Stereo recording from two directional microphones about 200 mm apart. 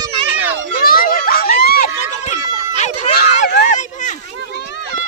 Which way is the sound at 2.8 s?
35° left (ahead or behind).